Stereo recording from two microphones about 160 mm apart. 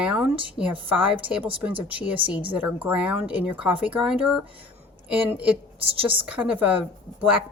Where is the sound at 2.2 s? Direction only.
35° right (ahead or behind).